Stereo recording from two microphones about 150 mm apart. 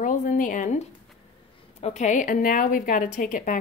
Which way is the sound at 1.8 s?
50° left (ahead or behind).